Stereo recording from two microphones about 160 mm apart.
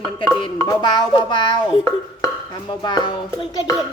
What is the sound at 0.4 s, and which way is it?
A child's voice, 25° left (ahead or behind).